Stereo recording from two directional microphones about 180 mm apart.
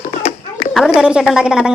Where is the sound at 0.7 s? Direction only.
5° right (ahead or behind).